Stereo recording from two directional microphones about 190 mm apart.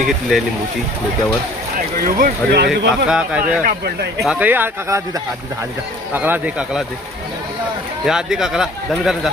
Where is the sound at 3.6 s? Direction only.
60° right (ahead or behind).